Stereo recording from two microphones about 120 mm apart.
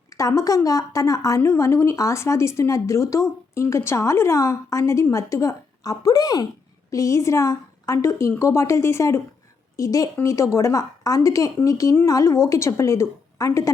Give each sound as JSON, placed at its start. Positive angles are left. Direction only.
{"t": 0.1, "sound": "speech", "side_deg": 25}